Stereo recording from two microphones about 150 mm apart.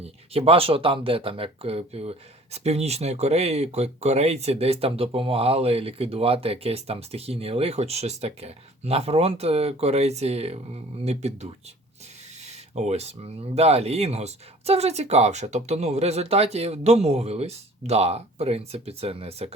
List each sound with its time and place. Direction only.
0.0 s speech: 40° right (ahead or behind)
12.7 s speech: 45° right (ahead or behind)